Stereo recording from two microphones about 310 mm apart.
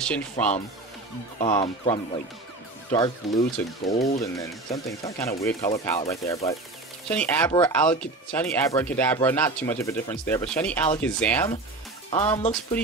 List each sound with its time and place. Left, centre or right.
0.0 s speech: centre
1.4 s speech: centre
12.1 s speech: centre